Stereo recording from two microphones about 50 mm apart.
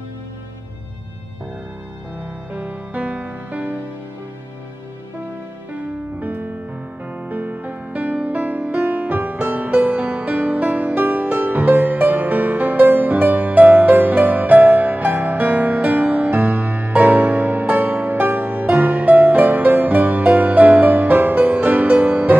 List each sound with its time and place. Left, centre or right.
2.5 s music: right
6.1 s music: right